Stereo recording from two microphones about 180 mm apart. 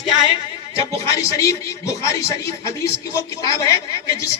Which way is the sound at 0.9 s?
15° left (ahead or behind).